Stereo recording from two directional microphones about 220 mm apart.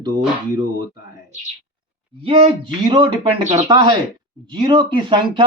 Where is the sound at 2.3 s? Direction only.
25° right (ahead or behind).